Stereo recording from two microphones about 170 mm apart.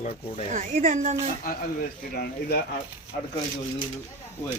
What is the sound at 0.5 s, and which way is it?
Speech, 50° right (ahead or behind).